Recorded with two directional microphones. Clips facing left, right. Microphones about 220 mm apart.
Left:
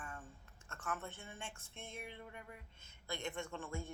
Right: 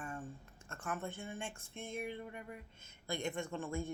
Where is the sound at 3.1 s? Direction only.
15° right (ahead or behind).